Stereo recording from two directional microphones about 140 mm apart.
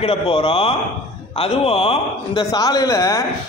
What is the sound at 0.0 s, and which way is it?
A man's voice, 40° left (ahead or behind).